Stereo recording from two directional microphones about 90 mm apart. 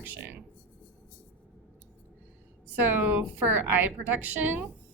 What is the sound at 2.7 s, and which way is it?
A woman's voice, 20° right (ahead or behind).